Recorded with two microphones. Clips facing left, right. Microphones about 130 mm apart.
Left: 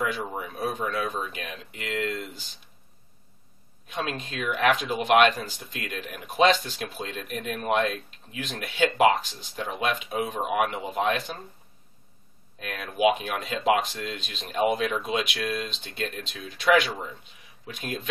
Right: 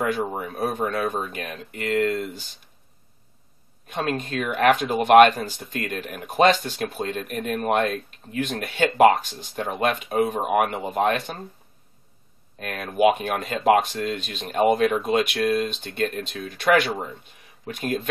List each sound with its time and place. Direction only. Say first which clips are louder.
0.0 s speech: right 5 dB; 50° right (ahead or behind)
3.8 s speech: right 5 dB; 50° right (ahead or behind)
12.5 s speech: right 6 dB; 50° right (ahead or behind)